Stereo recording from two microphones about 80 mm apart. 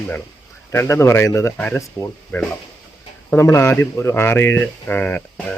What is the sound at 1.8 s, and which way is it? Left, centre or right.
Speech, left.